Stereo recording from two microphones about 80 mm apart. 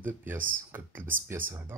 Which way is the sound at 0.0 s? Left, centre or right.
Right.